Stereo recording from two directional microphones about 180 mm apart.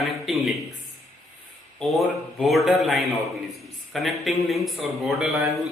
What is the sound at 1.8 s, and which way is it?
A man's voice, centre (ahead or behind).